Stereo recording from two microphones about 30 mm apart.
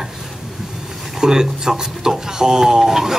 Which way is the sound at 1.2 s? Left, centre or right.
Right.